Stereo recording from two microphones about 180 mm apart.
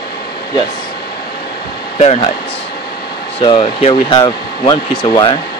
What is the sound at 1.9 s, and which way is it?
Speech, 35° left (ahead or behind).